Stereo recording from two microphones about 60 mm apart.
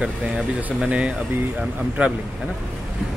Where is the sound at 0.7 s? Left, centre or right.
Centre.